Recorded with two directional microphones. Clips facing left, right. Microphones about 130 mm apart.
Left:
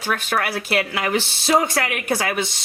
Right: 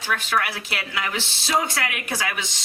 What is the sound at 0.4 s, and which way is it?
Speech, 55° left (ahead or behind).